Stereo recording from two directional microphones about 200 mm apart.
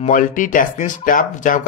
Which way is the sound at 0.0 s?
40° left (ahead or behind).